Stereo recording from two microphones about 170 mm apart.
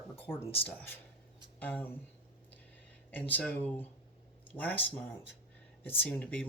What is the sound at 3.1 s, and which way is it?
Speech, 10° left (ahead or behind).